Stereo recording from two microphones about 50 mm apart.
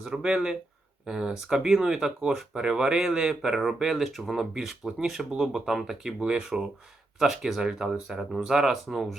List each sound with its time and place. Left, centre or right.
0.0 s speech: centre